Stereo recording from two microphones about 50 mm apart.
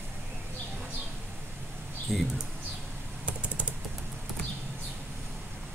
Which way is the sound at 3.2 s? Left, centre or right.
Right.